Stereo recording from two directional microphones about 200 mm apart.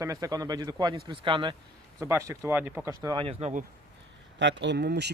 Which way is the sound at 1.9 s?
15° right (ahead or behind).